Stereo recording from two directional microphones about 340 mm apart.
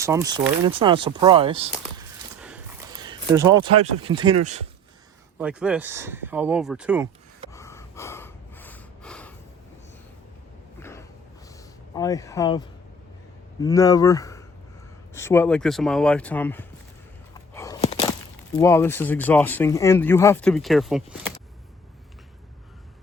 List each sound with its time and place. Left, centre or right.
0.0 s speech: centre
2.4 s a sound: centre
4.0 s speech: centre
5.4 s speech: centre
7.5 s snort: centre
10.8 s a sound: centre
11.9 s speech: centre
17.5 s a sound: centre
18.5 s speech: centre